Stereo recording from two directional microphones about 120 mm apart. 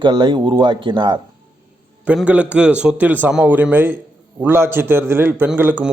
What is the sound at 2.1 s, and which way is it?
A man's voice, 15° right (ahead or behind).